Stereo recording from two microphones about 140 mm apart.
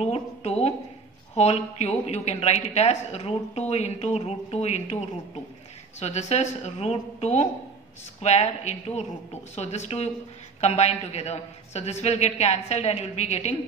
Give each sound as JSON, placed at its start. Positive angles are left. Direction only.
{"t": 0.0, "sound": "a woman's voice", "side_deg": 50}